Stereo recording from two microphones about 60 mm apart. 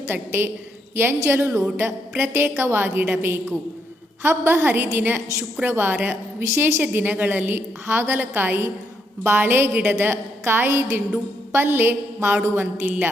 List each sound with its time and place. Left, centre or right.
0.1 s a woman's voice: right
6.4 s a woman's voice: right
6.8 s a woman's voice: right